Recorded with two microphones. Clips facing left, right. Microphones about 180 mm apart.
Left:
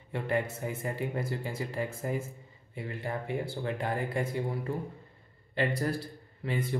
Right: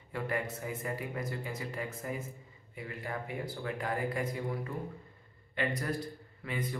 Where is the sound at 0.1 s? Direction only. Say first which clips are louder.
Left 4 dB; 25° left (ahead or behind).